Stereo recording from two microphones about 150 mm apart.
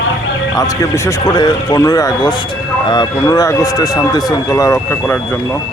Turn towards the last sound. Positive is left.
turn(degrees=15)  # may be behind; listen again after turning